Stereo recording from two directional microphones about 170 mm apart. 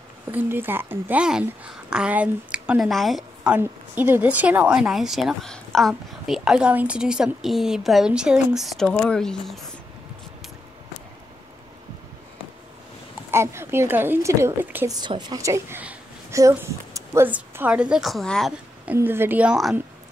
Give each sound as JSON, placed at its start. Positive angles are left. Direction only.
{"t": 0.3, "sound": "a woman's voice", "side_deg": -10}
{"t": 13.3, "sound": "a woman's voice", "side_deg": -15}
{"t": 14.9, "sound": "a woman's voice", "side_deg": -25}
{"t": 18.9, "sound": "a woman's voice", "side_deg": -10}